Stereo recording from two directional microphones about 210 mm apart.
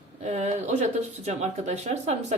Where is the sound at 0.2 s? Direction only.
30° right (ahead or behind).